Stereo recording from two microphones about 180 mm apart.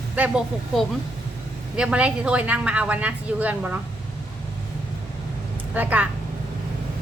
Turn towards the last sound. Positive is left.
turn(degrees=-10)  # may be behind; listen again after turning